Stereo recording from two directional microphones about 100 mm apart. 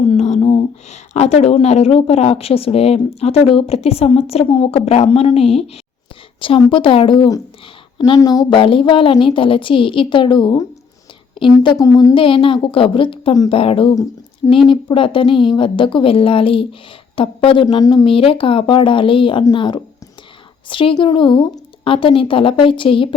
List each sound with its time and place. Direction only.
0.1 s a woman's voice: 90° left
6.4 s a woman's voice: 55° left (ahead or behind)
7.9 s a woman's voice: 50° left (ahead or behind)
8.4 s a woman's voice: 60° left (ahead or behind)
11.8 s speech: 35° left (ahead or behind)
12.1 s a woman's voice: 60° left (ahead or behind)
13.5 s speech: 70° left (ahead or behind)
14.5 s a woman's voice: 60° left (ahead or behind)
18.0 s a woman's voice: 65° left (ahead or behind)